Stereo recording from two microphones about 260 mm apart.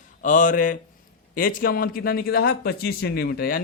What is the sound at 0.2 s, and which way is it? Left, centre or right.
A man's voice, left.